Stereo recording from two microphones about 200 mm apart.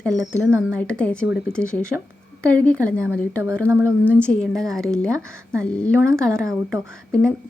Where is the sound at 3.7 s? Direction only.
10° right (ahead or behind).